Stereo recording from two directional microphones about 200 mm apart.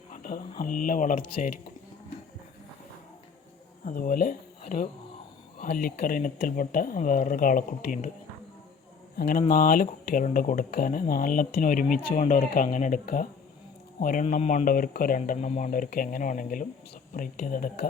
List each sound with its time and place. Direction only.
0.1 s speech: 45° left (ahead or behind)
3.8 s speech: 45° left (ahead or behind)
9.1 s speech: 50° left (ahead or behind)